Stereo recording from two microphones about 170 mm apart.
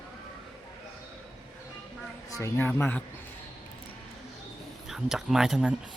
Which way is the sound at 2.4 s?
15° left (ahead or behind).